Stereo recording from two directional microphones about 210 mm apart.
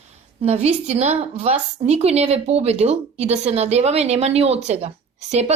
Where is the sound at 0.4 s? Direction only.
30° right (ahead or behind).